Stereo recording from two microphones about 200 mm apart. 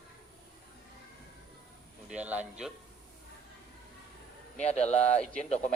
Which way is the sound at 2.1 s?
5° right (ahead or behind).